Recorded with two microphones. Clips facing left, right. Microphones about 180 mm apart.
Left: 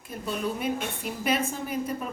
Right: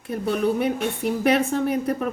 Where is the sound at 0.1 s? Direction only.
65° right (ahead or behind).